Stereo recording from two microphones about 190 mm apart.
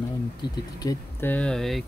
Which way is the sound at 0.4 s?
20° left (ahead or behind).